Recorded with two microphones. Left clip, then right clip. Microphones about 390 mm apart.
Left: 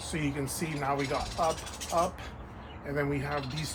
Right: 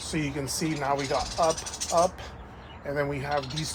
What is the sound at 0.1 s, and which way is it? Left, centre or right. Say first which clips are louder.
Speech: right 3 dB; centre.